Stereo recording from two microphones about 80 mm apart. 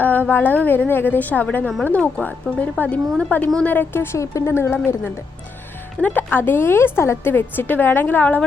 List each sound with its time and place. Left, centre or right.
0.3 s a woman's voice: left
6.0 s a woman's voice: left